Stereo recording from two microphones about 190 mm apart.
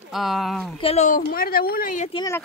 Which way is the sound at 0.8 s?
35° left (ahead or behind).